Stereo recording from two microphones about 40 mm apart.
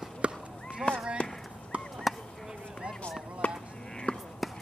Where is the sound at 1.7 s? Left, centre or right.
Right.